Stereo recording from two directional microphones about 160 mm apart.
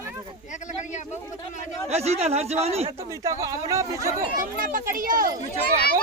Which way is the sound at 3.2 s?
20° right (ahead or behind).